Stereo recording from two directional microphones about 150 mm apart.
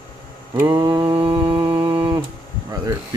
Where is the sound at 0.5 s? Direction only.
20° right (ahead or behind).